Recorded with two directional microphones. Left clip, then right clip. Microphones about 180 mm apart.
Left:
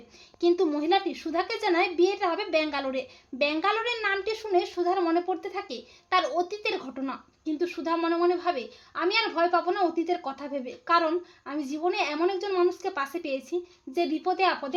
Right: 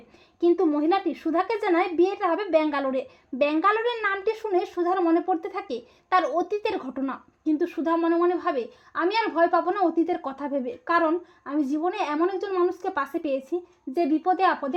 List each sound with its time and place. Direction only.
0.3 s speech: 30° right (ahead or behind)